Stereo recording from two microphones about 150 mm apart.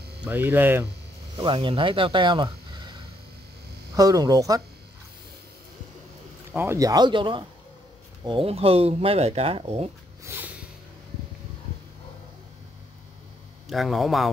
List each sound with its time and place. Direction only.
0.2 s speech: 15° right (ahead or behind)
1.4 s speech: 35° right (ahead or behind)
6.5 s speech: 15° right (ahead or behind); by 9.8 s 40° right (ahead or behind)
10.2 s a sound: 15° right (ahead or behind)
13.7 s a man's voice: centre (ahead or behind)